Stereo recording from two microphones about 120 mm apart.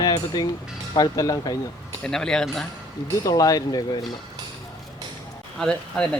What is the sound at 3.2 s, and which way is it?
Speech, 30° left (ahead or behind).